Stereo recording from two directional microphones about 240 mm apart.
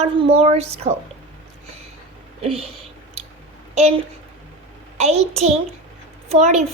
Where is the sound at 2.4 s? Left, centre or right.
Right.